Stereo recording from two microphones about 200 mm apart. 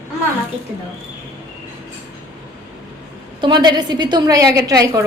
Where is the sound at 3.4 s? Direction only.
20° right (ahead or behind).